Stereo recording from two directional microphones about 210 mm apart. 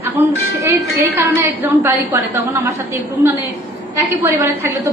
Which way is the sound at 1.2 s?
10° right (ahead or behind).